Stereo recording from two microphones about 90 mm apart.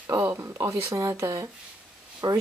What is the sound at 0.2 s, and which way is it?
Speech, 30° right (ahead or behind).